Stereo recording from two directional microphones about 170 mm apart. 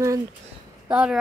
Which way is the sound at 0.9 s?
5° right (ahead or behind).